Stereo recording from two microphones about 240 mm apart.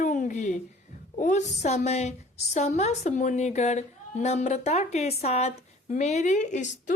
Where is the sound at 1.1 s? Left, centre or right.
Left.